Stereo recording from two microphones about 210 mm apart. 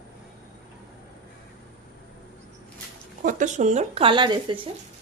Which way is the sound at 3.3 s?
35° right (ahead or behind).